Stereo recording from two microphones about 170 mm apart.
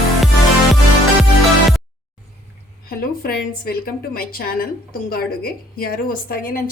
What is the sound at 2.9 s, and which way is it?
Speech, 65° left (ahead or behind).